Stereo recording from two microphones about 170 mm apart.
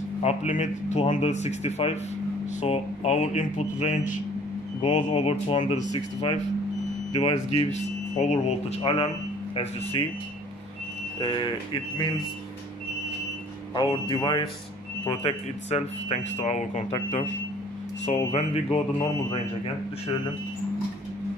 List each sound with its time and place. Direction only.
0.2 s speech: 40° left (ahead or behind)
4.9 s speech: 35° left (ahead or behind)
11.1 s speech: 30° left (ahead or behind)
14.0 s speech: 25° left (ahead or behind)
15.0 s speech: 35° left (ahead or behind)